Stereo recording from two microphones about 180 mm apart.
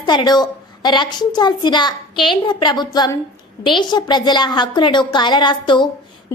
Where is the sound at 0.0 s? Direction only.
25° left (ahead or behind).